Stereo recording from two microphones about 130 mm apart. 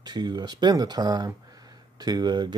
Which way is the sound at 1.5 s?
30° right (ahead or behind).